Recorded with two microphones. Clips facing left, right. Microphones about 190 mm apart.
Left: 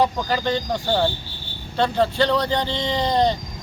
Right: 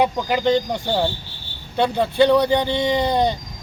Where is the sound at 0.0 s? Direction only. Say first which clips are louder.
Right 2 dB; 15° right (ahead or behind).